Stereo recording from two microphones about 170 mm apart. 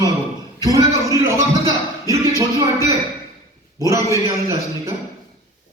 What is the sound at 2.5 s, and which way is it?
Speech, 15° right (ahead or behind).